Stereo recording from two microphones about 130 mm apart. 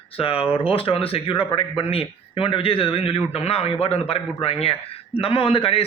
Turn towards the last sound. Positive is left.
turn(degrees=45)  # may be behind; listen again after turning